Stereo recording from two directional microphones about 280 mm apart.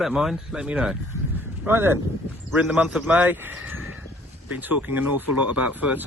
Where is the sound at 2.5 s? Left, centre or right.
Centre.